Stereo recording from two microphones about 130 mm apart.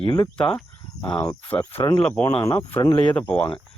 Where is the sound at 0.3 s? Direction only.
5° left (ahead or behind).